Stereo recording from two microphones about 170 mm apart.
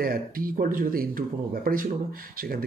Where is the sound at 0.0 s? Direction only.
60° right (ahead or behind).